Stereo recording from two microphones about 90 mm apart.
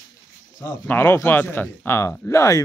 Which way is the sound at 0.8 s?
25° left (ahead or behind).